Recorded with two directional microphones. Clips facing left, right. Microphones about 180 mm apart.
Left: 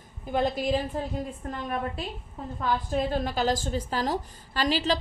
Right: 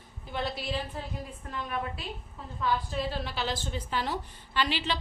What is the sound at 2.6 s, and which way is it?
A woman's voice, 50° left (ahead or behind).